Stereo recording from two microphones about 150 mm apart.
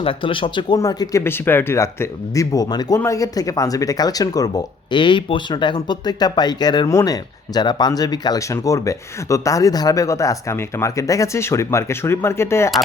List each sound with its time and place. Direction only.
0.0 s speech: 35° left (ahead or behind)
0.8 s speech: 20° left (ahead or behind)